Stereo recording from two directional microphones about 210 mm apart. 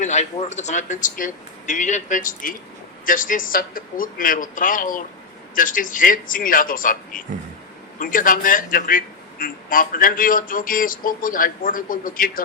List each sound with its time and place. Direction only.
0.0 s a man's voice: 35° left (ahead or behind)